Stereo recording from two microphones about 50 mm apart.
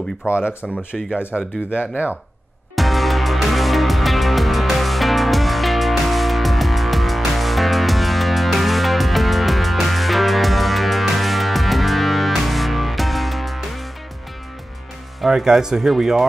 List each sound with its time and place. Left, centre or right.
0.2 s speech: right
0.9 s speech: centre
1.3 s speech: right
2.7 s music: centre
15.2 s speech: centre